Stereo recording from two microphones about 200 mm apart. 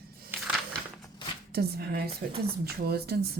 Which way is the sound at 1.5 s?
50° right (ahead or behind).